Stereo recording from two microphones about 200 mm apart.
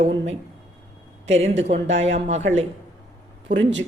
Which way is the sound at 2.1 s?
35° right (ahead or behind).